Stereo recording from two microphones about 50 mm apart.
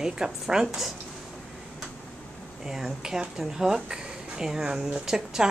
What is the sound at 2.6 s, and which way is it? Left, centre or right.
Speech, centre.